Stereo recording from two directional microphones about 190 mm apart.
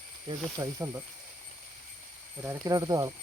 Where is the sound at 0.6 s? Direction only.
15° right (ahead or behind).